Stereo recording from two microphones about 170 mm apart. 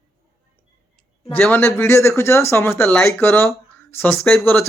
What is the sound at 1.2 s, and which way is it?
Speech, 5° left (ahead or behind).